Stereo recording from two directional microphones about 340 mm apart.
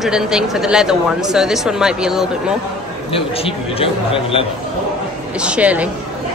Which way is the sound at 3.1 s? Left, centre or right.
Centre.